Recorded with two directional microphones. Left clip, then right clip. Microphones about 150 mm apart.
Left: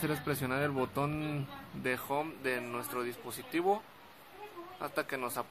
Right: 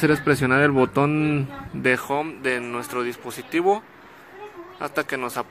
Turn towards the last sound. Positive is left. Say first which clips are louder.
# right 10 dB
turn(degrees=-30)  # may be behind; listen again after turning